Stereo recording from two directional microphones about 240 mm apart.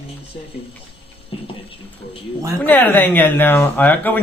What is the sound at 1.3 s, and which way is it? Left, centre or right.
Speech, left.